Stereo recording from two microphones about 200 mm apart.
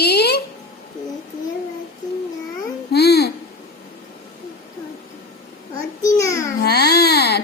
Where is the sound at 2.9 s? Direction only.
55° left (ahead or behind).